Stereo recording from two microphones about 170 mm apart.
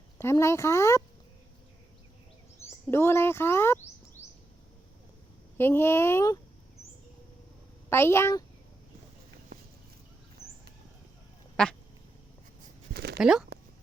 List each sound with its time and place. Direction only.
0.2 s speech: 15° left (ahead or behind)
2.6 s speech: 15° left (ahead or behind)
4.2 s a sound: 45° left (ahead or behind)
5.5 s speech: 15° left (ahead or behind)
7.9 s a woman's voice: 15° left (ahead or behind)
11.6 s quack: 5° left (ahead or behind)
12.9 s a sound: 75° right (ahead or behind)
13.1 s speech: 5° right (ahead or behind)